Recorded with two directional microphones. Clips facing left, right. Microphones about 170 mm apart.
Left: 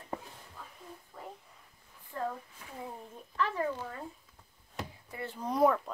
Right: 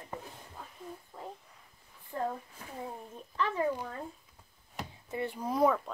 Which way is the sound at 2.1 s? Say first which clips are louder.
Right 2 dB; 25° right (ahead or behind).